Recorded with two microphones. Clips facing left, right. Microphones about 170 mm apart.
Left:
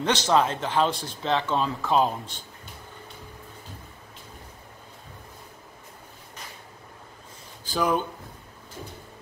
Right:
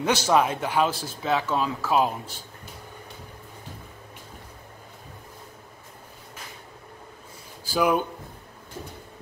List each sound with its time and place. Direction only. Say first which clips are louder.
0.0 s speech: right 1 dB; 10° right (ahead or behind)
7.6 s speech: right 2 dB; 10° right (ahead or behind)